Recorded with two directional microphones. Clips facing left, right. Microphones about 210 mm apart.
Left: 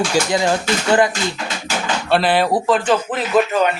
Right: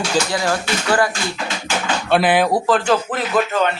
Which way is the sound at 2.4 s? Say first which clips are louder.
Even; centre (ahead or behind).